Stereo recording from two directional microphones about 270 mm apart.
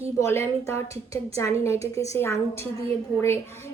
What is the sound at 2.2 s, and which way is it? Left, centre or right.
Speech, centre.